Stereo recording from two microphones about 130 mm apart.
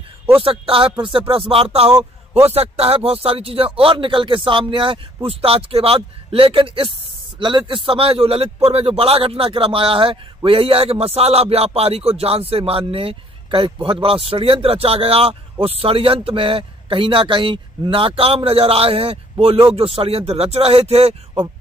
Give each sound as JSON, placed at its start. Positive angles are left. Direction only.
{"t": 0.4, "sound": "a man's voice", "side_deg": -45}
{"t": 2.0, "sound": "a man's voice", "side_deg": -20}
{"t": 2.5, "sound": "a man's voice", "side_deg": -50}